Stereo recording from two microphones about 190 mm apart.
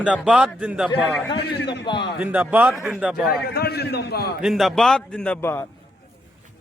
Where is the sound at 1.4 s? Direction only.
60° left (ahead or behind).